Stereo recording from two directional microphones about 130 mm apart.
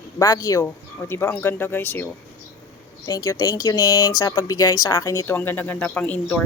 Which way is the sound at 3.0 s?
30° left (ahead or behind).